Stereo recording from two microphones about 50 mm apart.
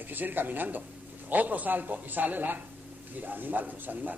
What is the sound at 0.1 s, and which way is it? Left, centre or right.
A man's voice, right.